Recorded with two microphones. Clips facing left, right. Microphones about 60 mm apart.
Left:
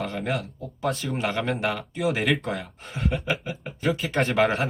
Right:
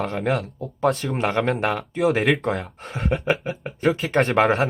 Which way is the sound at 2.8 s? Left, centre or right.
Right.